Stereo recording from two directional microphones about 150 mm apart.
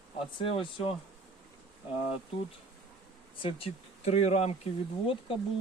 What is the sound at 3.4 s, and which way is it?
Speech, 40° left (ahead or behind).